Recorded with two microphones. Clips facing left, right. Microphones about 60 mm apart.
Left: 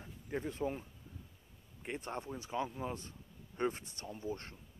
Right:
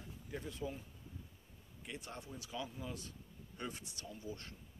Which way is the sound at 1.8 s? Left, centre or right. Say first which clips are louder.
Left 7 dB; left.